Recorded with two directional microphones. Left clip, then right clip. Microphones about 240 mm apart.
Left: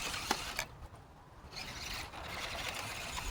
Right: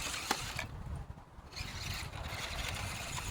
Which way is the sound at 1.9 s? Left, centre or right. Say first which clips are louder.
Even; centre.